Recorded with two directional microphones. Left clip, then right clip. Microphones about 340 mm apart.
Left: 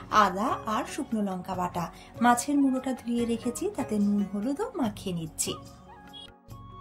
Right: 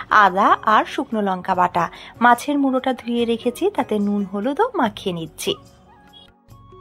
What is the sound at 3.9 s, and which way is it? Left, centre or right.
Speech, centre.